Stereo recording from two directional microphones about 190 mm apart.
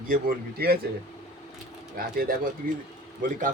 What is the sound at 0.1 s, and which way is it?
Speech, 50° right (ahead or behind).